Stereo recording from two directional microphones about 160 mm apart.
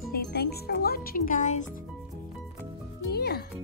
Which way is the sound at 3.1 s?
80° left.